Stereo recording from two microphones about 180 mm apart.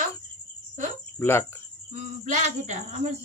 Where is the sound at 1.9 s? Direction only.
40° right (ahead or behind).